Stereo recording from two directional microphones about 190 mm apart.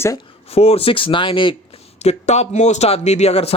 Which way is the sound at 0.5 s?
30° left (ahead or behind).